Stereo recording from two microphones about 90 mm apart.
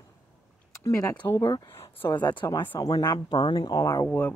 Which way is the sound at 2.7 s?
50° left (ahead or behind).